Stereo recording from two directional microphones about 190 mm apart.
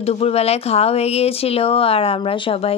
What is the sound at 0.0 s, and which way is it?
Speech, 30° left (ahead or behind).